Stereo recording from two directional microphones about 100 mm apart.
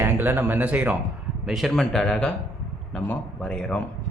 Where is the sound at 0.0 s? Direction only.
20° right (ahead or behind).